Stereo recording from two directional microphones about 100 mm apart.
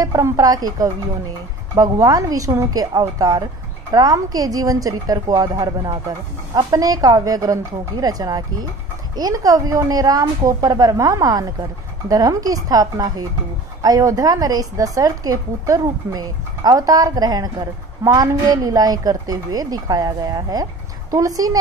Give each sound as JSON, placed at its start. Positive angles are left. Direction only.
{"t": 0.0, "sound": "a woman's voice", "side_deg": -35}